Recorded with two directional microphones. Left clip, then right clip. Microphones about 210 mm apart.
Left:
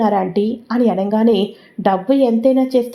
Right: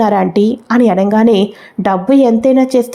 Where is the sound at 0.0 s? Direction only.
25° right (ahead or behind).